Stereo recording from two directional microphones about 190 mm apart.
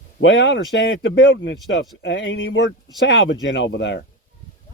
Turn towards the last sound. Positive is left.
turn(degrees=70)  # may be behind; listen again after turning